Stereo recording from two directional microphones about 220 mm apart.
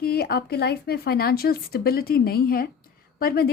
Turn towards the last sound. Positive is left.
turn(degrees=45)  # may be behind; listen again after turning